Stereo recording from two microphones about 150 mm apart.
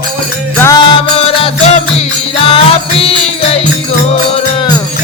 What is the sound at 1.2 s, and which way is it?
Music, 40° left (ahead or behind).